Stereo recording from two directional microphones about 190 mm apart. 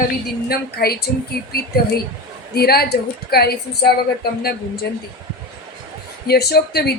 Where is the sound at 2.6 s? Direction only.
55° left (ahead or behind).